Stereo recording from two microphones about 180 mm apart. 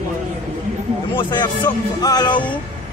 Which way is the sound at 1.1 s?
25° left (ahead or behind).